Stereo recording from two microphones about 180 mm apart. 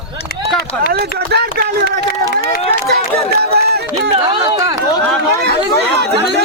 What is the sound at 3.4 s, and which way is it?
Run, 65° right (ahead or behind).